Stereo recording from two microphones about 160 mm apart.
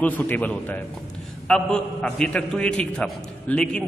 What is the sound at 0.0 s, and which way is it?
A man's voice, 10° left (ahead or behind).